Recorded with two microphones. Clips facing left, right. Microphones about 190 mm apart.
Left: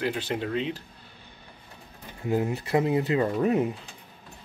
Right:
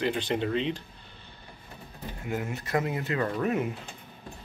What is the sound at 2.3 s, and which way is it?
Speech, 35° left (ahead or behind).